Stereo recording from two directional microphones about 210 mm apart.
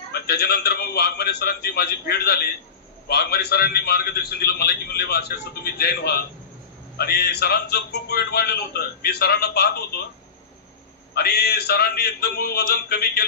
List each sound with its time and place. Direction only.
0.1 s a man's voice: 50° left (ahead or behind)
11.1 s a man's voice: 50° left (ahead or behind)